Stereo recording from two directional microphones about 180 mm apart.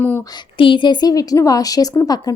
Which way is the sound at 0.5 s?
30° left (ahead or behind).